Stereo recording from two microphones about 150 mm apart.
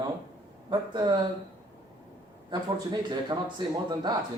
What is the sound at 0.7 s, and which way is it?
Speech, 30° right (ahead or behind).